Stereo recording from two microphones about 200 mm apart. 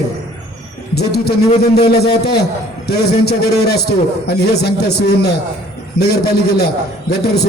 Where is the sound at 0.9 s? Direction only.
55° left (ahead or behind).